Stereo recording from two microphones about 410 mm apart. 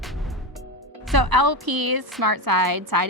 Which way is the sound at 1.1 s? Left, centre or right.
Right.